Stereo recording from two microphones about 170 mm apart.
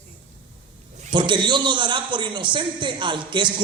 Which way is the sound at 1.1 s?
30° right (ahead or behind).